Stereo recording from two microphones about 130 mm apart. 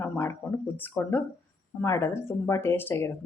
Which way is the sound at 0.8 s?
15° left (ahead or behind).